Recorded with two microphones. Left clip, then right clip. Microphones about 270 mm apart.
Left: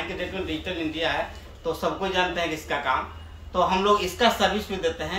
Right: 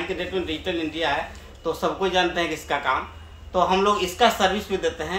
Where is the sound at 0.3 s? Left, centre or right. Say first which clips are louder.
Right 3 dB; right.